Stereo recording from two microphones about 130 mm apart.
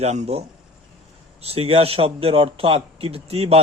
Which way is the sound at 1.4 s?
50° right (ahead or behind).